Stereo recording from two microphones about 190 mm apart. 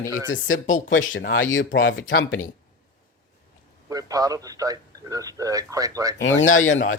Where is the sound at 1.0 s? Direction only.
90° left.